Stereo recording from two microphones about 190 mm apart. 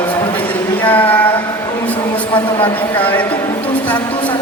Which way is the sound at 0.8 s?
10° left (ahead or behind).